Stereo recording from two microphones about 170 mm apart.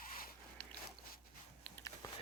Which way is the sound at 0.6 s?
5° left (ahead or behind).